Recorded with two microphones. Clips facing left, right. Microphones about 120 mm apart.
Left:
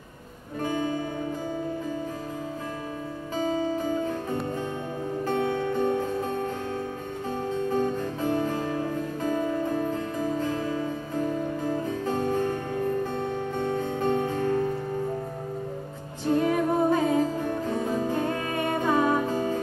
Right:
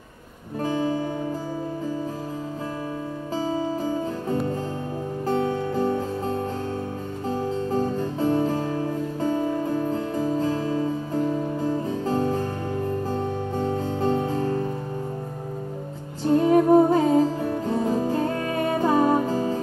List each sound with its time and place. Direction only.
0.6 s music: 30° right (ahead or behind)
3.3 s music: 35° right (ahead or behind)
5.2 s music: 35° right (ahead or behind)
7.7 s music: 30° right (ahead or behind)
10.1 s music: 30° right (ahead or behind)
16.3 s humming: 35° right (ahead or behind)
17.6 s music: 35° right (ahead or behind)